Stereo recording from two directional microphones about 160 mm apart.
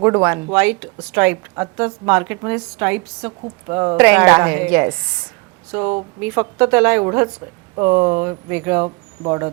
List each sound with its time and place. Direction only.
0.0 s a woman's voice: 10° right (ahead or behind)